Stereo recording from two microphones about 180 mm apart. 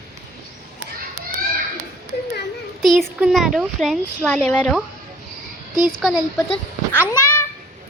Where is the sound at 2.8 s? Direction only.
Centre (ahead or behind).